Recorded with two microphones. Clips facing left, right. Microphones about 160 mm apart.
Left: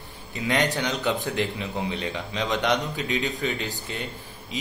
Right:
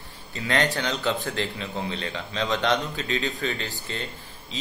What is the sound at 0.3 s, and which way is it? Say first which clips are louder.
Speech: left 1 dB; 15° left (ahead or behind).